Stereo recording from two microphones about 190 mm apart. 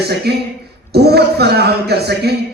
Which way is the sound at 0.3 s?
60° right (ahead or behind).